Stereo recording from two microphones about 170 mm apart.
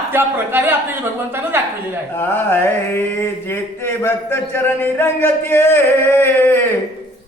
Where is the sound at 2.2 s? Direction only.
15° left (ahead or behind).